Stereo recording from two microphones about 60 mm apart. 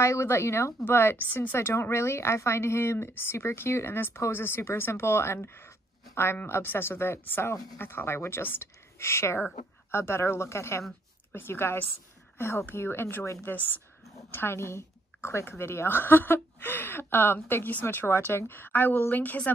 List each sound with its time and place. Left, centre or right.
0.0 s a woman's voice: left
0.8 s a woman's voice: left
14.3 s a woman's voice: left